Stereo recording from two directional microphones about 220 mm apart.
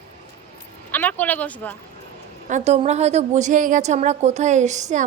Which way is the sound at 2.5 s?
30° right (ahead or behind).